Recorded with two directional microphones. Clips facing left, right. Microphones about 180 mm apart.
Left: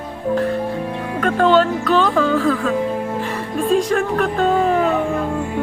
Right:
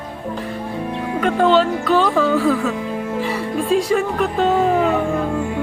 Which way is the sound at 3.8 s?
5° right (ahead or behind).